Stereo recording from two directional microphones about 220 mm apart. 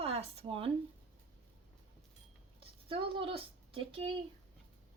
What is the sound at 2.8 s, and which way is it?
A woman's voice, 25° right (ahead or behind).